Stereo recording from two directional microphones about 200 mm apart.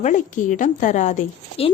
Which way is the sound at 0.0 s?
40° left (ahead or behind).